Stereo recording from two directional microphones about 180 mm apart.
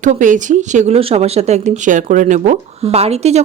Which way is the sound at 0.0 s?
45° right (ahead or behind).